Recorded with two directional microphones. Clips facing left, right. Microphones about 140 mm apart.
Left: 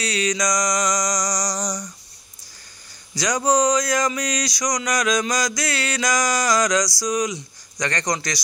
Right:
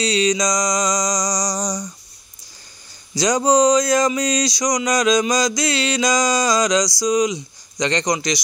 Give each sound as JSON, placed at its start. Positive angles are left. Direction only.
{"t": 0.0, "sound": "speech", "side_deg": -25}
{"t": 3.2, "sound": "speech", "side_deg": -25}